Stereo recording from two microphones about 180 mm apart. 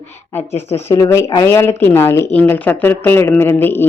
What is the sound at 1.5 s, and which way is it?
Speech, 10° left (ahead or behind).